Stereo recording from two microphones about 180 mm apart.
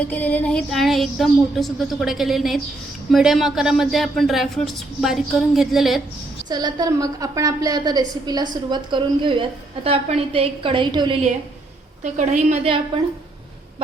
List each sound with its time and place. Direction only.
0.0 s speech: 10° left (ahead or behind)
6.5 s a woman's voice: 25° right (ahead or behind)
12.0 s a woman's voice: 45° right (ahead or behind)